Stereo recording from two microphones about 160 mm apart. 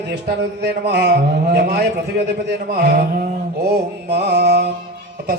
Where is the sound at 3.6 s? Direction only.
90° right.